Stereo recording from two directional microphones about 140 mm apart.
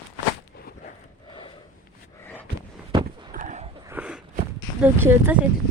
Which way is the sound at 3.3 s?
60° right (ahead or behind).